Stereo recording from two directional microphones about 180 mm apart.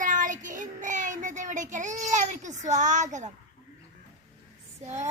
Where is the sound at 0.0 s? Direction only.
45° right (ahead or behind).